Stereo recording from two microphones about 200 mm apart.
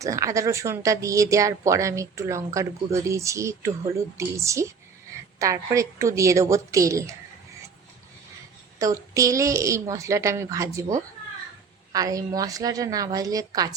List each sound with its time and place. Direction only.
0.0 s speech: 15° right (ahead or behind)
8.8 s speech: 15° right (ahead or behind)